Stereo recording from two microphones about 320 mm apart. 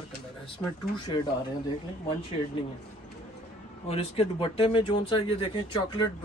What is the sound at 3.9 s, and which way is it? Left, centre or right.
Speech, centre.